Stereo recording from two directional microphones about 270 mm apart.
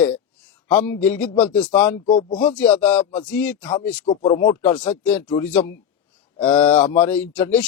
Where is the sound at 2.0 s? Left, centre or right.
Centre.